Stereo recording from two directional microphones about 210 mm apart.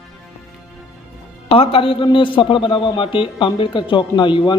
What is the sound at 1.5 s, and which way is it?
A man's voice, 25° left (ahead or behind).